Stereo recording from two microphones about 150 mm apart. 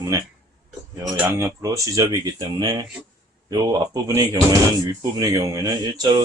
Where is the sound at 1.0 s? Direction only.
10° right (ahead or behind).